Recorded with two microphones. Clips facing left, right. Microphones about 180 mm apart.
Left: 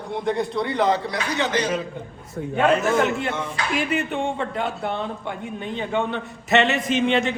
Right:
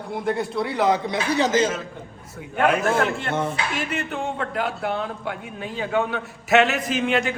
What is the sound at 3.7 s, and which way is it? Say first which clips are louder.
A man's voice: left 4 dB; centre (ahead or behind).